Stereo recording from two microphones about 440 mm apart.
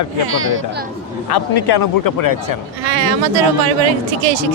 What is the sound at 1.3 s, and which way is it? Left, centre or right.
A man's voice, left.